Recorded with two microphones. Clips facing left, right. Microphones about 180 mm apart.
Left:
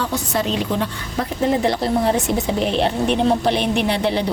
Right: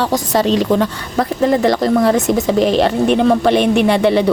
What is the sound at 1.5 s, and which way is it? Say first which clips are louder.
Speech: right 4 dB; 65° right (ahead or behind).